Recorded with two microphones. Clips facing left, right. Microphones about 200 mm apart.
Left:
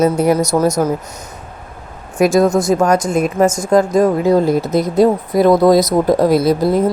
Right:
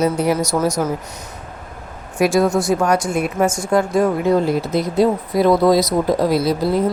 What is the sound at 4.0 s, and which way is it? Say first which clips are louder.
Speech: left 4 dB; 40° left (ahead or behind).